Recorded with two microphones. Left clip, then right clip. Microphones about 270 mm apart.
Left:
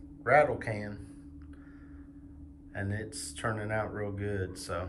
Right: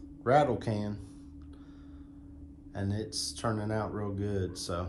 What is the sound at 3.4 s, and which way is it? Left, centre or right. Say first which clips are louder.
Speech: left 2 dB; centre.